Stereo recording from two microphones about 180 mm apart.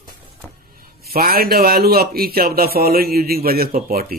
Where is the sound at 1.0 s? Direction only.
55° right (ahead or behind).